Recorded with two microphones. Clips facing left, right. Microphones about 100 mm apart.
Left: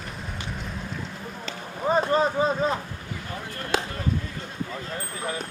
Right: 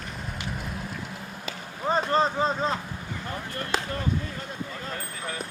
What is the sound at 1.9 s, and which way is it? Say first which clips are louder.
Speech: left 2 dB; 10° left (ahead or behind).